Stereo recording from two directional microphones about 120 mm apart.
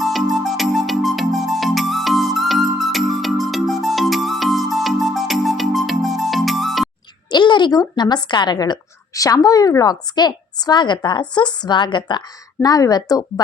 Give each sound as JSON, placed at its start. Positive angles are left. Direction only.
{"t": 0.0, "sound": "music", "side_deg": 0}
{"t": 7.3, "sound": "speech", "side_deg": 40}